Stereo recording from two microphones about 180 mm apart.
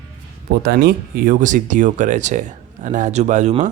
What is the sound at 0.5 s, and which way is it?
Speech, 65° right (ahead or behind).